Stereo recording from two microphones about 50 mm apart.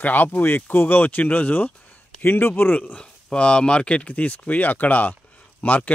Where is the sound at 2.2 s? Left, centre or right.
Left.